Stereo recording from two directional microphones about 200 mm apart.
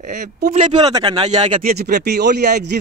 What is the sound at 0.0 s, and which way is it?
Speech, 40° right (ahead or behind).